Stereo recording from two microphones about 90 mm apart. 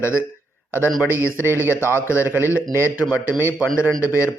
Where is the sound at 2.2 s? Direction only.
25° right (ahead or behind).